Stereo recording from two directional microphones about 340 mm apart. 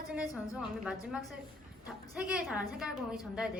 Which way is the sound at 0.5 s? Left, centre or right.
Centre.